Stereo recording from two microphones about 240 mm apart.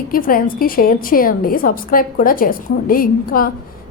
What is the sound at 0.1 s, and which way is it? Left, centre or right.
A woman's voice, left.